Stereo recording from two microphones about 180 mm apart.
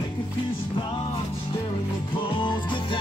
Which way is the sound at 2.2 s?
25° left (ahead or behind).